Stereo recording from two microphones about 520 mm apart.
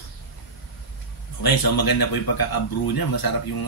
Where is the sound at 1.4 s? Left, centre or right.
Left.